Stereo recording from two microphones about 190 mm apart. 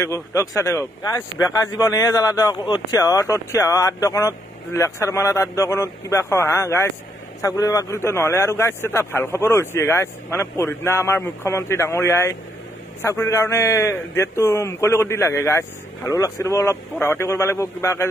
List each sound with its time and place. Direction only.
0.0 s speech: 15° left (ahead or behind)